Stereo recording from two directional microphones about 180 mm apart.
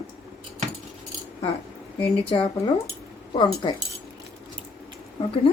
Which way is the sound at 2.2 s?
30° left (ahead or behind).